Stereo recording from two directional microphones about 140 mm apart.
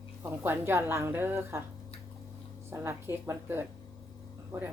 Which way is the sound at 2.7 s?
20° right (ahead or behind).